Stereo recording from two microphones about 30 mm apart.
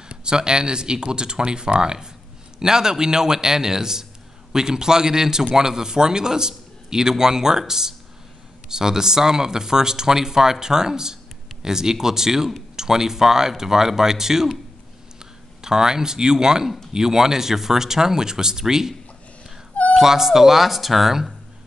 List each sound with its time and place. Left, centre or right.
0.1 s a man's voice: right
15.6 s a man's voice: right; by 21.1 s centre